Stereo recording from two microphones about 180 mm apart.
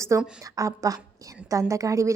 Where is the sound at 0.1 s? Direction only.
15° right (ahead or behind).